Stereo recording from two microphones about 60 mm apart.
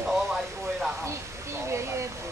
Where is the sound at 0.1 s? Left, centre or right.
Centre.